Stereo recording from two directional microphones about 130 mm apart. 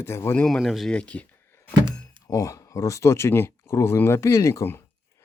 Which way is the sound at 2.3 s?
25° left (ahead or behind).